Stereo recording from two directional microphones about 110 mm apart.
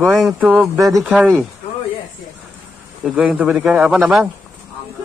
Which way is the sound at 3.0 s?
5° right (ahead or behind).